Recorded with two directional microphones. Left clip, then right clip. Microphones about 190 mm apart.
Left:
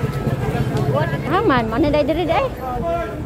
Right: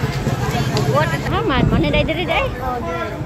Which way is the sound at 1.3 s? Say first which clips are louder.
Left 5 dB; 35° left (ahead or behind).